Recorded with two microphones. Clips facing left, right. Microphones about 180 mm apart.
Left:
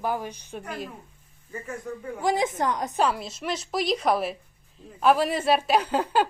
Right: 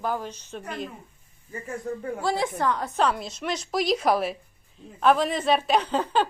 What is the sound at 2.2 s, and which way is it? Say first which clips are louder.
Speech: left 2 dB; 15° left (ahead or behind).